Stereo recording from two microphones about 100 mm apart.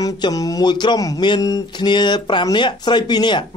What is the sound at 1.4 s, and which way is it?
Mantra, 35° left (ahead or behind).